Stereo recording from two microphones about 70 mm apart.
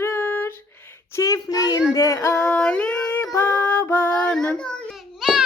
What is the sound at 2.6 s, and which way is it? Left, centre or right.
Singing, centre.